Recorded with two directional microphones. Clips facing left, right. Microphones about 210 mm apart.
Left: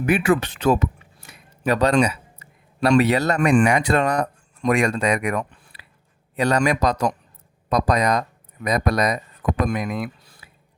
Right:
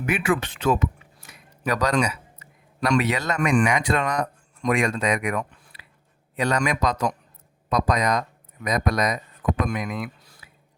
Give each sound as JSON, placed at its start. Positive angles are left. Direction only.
{"t": 0.0, "sound": "speech", "side_deg": 40}